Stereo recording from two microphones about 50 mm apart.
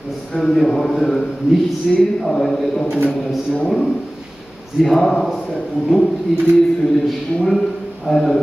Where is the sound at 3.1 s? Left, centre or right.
Centre.